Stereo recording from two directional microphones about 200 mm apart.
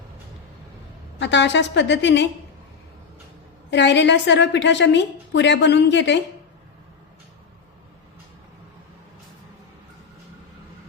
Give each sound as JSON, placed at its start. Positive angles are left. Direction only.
{"t": 1.2, "sound": "a woman's voice", "side_deg": 60}
{"t": 3.7, "sound": "a woman's voice", "side_deg": 60}